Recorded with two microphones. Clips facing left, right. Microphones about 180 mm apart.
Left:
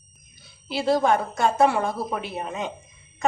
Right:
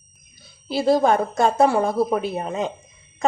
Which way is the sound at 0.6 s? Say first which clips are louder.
Right 3 dB; 40° right (ahead or behind).